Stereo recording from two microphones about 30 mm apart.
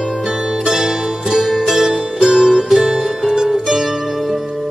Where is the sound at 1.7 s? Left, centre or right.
Centre.